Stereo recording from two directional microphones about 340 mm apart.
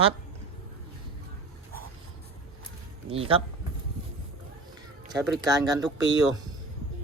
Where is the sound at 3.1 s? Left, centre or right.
Centre.